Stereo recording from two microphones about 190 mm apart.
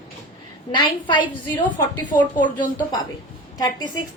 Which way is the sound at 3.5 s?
20° left (ahead or behind).